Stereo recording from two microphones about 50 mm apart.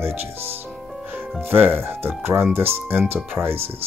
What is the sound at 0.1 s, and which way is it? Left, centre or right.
Speech, right.